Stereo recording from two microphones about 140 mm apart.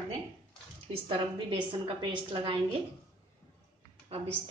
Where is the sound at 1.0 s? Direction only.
35° right (ahead or behind).